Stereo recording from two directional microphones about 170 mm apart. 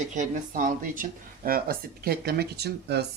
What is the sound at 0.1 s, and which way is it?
Speech, 45° right (ahead or behind).